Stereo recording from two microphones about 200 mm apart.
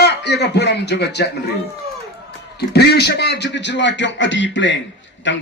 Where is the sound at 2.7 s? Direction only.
55° left (ahead or behind).